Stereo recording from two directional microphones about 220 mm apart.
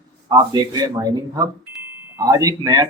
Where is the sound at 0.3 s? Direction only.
15° right (ahead or behind).